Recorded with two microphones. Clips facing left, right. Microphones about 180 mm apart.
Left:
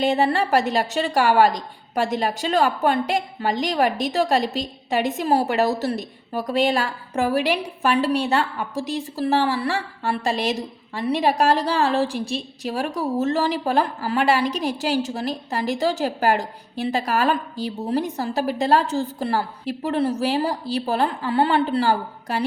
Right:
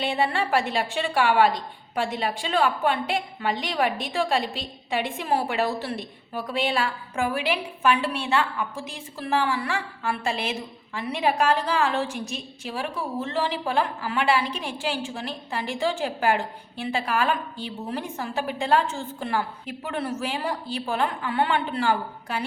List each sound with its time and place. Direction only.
0.0 s a woman's voice: 40° left (ahead or behind)